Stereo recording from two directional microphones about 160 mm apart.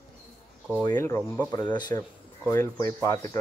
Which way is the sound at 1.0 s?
15° left (ahead or behind).